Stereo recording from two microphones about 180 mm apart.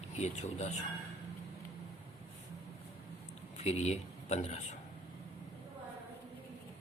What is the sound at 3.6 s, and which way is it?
Speech, 35° left (ahead or behind).